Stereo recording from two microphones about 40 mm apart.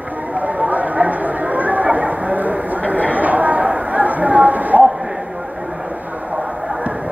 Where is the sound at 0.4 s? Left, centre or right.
Right.